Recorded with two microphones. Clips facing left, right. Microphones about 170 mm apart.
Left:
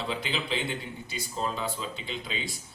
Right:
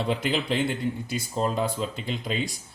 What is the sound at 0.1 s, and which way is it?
Speech, 50° right (ahead or behind).